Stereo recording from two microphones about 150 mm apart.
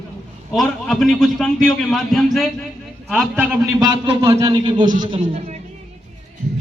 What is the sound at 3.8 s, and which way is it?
A man's voice, 20° right (ahead or behind).